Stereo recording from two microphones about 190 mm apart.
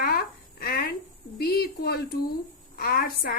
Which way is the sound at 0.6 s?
50° left (ahead or behind).